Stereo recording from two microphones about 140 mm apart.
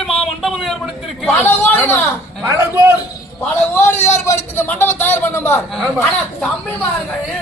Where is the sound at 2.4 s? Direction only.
15° right (ahead or behind).